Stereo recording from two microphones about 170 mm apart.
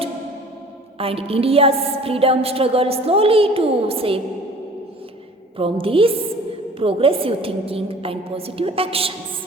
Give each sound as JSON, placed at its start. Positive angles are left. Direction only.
{"t": 0.9, "sound": "a woman's voice", "side_deg": -35}
{"t": 5.5, "sound": "a woman's voice", "side_deg": -30}